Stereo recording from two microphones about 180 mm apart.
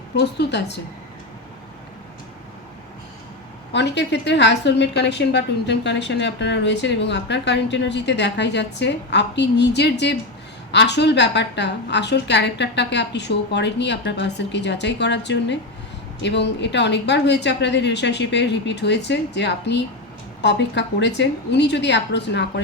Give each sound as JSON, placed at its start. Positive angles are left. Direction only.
{"t": 0.2, "sound": "a woman's voice", "side_deg": 70}
{"t": 3.7, "sound": "a woman's voice", "side_deg": 75}